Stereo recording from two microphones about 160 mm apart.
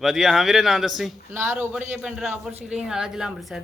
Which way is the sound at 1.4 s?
10° right (ahead or behind).